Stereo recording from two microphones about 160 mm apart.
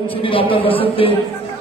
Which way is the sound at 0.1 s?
35° left (ahead or behind).